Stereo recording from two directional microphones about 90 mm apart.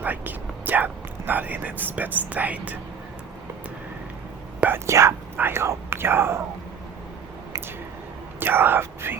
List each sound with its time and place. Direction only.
0.0 s speech: 20° right (ahead or behind)
4.9 s speech: 30° right (ahead or behind)
8.4 s speech: 25° right (ahead or behind)